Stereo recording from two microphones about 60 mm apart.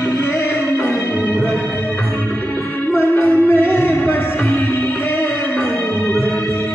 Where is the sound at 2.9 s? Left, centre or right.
Left.